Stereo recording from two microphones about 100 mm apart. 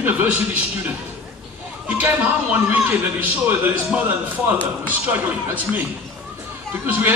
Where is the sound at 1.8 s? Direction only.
15° right (ahead or behind).